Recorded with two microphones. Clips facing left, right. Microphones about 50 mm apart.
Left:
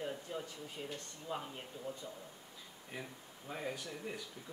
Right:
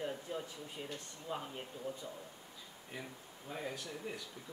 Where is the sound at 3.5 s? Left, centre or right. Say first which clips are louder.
Left 1 dB; centre.